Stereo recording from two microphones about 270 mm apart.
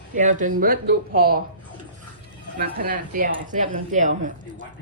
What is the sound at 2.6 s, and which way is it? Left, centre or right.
Speech, right.